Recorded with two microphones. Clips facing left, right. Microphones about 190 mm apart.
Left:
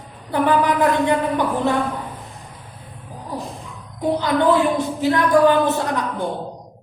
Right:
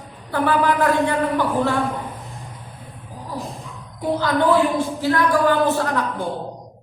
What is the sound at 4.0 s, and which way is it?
A woman's voice, 20° left (ahead or behind).